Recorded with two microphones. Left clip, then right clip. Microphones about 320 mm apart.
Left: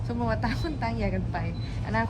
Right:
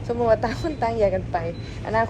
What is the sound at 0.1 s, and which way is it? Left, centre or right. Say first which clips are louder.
Speech: right 10 dB; centre.